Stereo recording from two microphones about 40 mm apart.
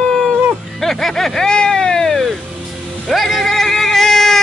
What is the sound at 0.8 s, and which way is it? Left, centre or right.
Vehicle, centre.